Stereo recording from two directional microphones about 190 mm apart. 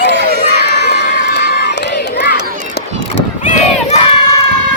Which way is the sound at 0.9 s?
60° left (ahead or behind).